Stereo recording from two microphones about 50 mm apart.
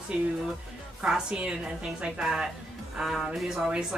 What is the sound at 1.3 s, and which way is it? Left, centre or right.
A woman's voice, right.